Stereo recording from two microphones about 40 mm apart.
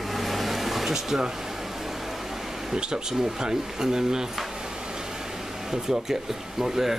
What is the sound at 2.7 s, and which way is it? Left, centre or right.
Speech, centre.